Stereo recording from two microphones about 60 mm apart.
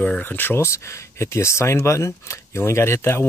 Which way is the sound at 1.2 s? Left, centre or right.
Left.